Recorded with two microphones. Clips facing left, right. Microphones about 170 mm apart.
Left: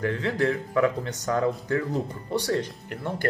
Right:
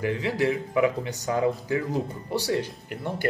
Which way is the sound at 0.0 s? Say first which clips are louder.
Even; 10° right (ahead or behind).